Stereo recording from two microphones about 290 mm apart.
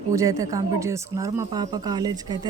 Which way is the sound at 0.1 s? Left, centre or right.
Centre.